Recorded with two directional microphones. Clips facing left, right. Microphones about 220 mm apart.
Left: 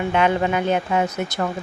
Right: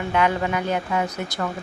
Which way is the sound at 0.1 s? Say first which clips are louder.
Left 1 dB; 25° left (ahead or behind).